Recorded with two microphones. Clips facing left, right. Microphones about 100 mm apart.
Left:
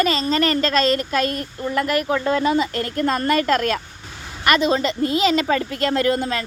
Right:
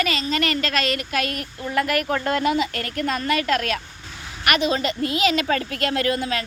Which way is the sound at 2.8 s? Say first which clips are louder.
Left 4 dB; 30° left (ahead or behind).